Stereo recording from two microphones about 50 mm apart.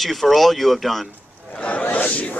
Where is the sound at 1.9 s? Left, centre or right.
Left.